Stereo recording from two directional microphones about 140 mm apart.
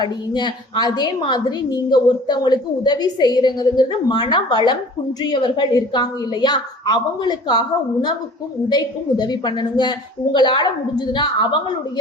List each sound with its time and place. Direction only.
0.0 s a woman's voice: 30° left (ahead or behind)
8.7 s a woman's voice: 30° left (ahead or behind)